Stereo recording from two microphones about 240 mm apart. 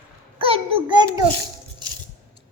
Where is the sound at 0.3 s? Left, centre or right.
Right.